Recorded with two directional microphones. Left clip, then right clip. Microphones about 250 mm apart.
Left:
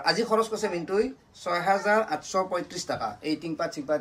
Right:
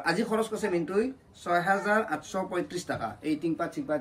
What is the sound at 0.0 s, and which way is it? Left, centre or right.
Speech, left.